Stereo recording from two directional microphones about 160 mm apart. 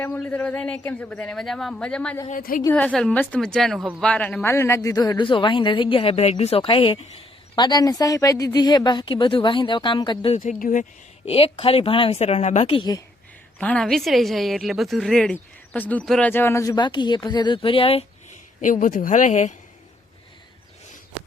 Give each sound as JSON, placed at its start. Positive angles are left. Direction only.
{"t": 0.0, "sound": "a woman's voice", "side_deg": 10}
{"t": 2.3, "sound": "a woman's voice", "side_deg": 60}
{"t": 2.7, "sound": "a woman's voice", "side_deg": 5}
{"t": 4.0, "sound": "speech", "side_deg": 10}
{"t": 10.6, "sound": "speech", "side_deg": 50}
{"t": 11.3, "sound": "speech", "side_deg": 35}
{"t": 13.6, "sound": "a woman's voice", "side_deg": 5}
{"t": 18.6, "sound": "speech", "side_deg": 55}